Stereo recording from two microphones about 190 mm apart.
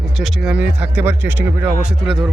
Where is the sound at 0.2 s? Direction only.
Centre (ahead or behind).